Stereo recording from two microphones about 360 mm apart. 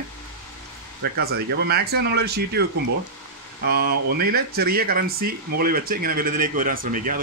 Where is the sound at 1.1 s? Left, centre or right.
Right.